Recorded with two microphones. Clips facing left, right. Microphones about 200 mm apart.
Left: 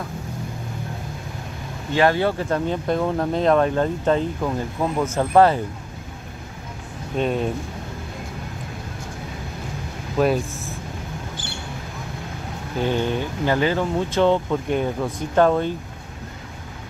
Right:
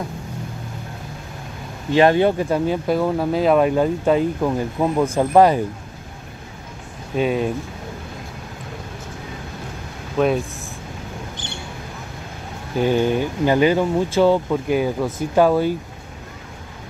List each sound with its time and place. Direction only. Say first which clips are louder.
2.0 s speech: right 4 dB; 20° right (ahead or behind)
7.2 s speech: right 2 dB; 5° right (ahead or behind)
10.1 s speech: right 1 dB; centre (ahead or behind)
12.8 s speech: right 4 dB; 10° right (ahead or behind)